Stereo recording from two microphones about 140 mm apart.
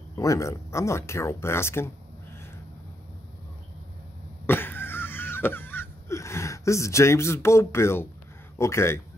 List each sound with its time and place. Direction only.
0.1 s speech: 25° left (ahead or behind)
4.5 s wheeze: 15° left (ahead or behind)
8.5 s speech: 20° left (ahead or behind)